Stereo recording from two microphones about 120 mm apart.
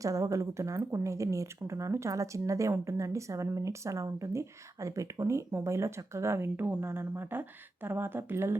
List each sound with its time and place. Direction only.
0.0 s speech: 25° right (ahead or behind)